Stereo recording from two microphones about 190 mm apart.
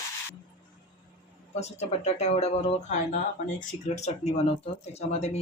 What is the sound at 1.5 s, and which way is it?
Speech, 35° left (ahead or behind).